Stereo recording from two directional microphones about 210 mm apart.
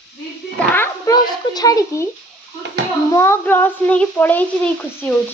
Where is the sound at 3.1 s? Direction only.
10° left (ahead or behind).